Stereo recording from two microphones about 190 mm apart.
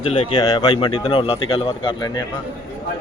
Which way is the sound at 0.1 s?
30° left (ahead or behind).